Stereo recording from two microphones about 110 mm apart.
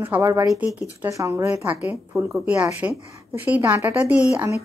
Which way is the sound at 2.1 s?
10° right (ahead or behind).